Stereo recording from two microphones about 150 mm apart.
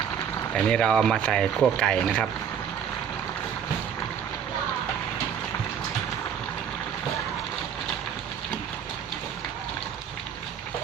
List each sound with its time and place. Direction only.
0.7 s speech: 5° left (ahead or behind)